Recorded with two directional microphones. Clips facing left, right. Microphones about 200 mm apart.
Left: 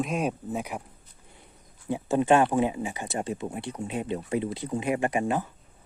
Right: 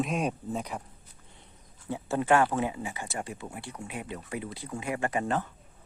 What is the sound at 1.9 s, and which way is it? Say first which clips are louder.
Speech: left 4 dB; 15° left (ahead or behind).